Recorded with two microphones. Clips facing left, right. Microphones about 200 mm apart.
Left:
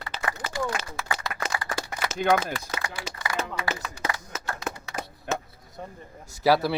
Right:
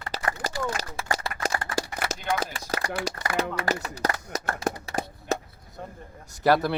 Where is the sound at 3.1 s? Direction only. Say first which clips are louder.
Right 3 dB; 40° right (ahead or behind).